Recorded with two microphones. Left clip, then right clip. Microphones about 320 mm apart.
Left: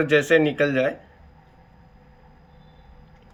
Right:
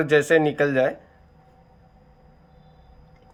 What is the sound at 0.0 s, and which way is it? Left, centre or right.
Speech, centre.